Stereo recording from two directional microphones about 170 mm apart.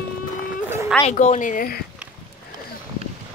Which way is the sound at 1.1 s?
45° left (ahead or behind).